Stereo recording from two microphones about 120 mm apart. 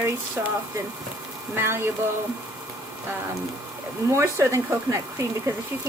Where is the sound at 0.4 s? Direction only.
15° right (ahead or behind).